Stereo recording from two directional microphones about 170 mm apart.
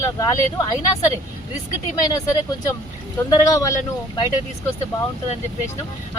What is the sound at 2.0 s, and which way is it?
Speech, 20° left (ahead or behind).